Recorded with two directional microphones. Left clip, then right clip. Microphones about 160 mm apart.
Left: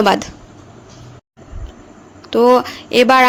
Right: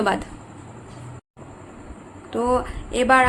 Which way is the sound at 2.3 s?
60° left (ahead or behind).